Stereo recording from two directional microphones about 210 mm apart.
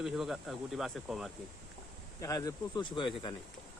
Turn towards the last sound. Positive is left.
turn(degrees=20)  # may be behind; listen again after turning